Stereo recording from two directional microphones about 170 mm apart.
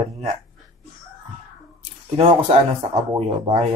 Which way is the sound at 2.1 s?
40° right (ahead or behind).